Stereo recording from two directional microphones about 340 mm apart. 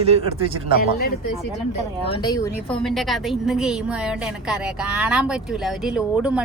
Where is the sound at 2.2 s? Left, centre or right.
Centre.